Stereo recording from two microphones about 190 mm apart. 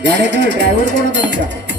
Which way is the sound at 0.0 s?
65° right (ahead or behind).